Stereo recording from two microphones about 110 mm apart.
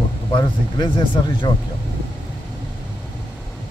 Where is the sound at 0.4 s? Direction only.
45° left (ahead or behind).